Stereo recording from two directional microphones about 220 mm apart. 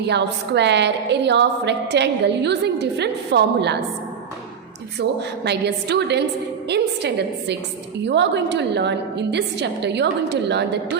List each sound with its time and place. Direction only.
0.1 s a woman's voice: 50° right (ahead or behind)
4.9 s a woman's voice: 50° right (ahead or behind)